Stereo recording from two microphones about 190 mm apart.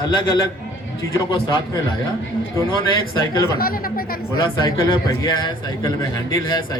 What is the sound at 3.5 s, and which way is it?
Speech, 50° left (ahead or behind).